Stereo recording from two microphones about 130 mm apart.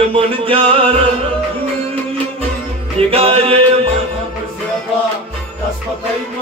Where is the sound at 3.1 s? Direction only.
45° right (ahead or behind).